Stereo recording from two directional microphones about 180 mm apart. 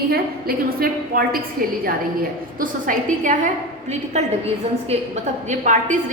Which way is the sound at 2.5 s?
50° right (ahead or behind).